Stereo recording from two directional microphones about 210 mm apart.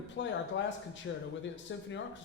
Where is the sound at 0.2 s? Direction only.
60° left (ahead or behind).